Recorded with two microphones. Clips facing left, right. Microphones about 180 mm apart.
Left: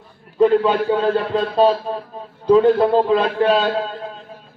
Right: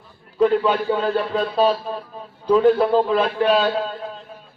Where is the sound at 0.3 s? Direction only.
25° left (ahead or behind).